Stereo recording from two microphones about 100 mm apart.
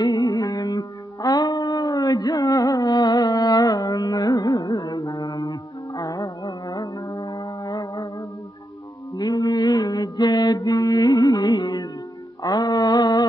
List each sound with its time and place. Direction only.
0.0 s music: 40° left (ahead or behind)
9.1 s mantra: 35° left (ahead or behind)